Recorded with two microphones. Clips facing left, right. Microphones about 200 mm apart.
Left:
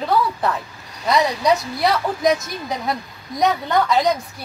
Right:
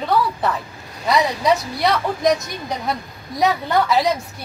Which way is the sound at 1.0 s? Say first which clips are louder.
Even; centre (ahead or behind).